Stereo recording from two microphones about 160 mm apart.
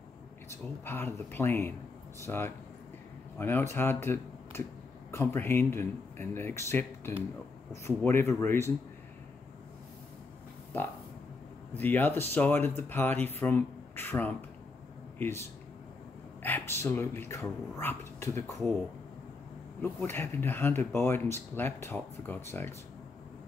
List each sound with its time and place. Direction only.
0.5 s speech: 15° left (ahead or behind)
11.7 s speech: 10° left (ahead or behind)
16.4 s speech: 15° left (ahead or behind)
19.8 s speech: 15° left (ahead or behind)